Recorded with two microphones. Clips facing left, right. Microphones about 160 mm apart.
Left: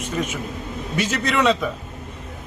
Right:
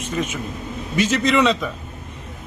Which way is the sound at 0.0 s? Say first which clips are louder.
Right 1 dB; 10° left (ahead or behind).